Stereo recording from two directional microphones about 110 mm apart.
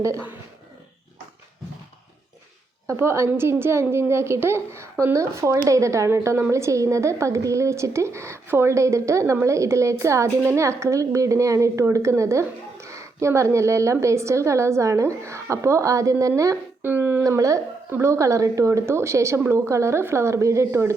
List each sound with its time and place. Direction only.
2.8 s a woman's voice: 25° right (ahead or behind)
16.8 s a woman's voice: 20° right (ahead or behind)